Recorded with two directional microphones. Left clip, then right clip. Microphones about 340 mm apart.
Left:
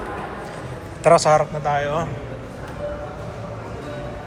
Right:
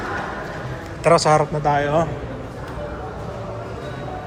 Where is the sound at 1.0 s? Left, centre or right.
Centre.